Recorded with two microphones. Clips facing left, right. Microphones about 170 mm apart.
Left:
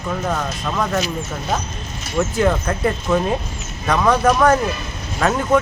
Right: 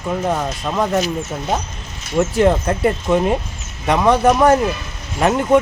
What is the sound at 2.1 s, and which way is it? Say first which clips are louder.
Speech: right 3 dB; 25° right (ahead or behind).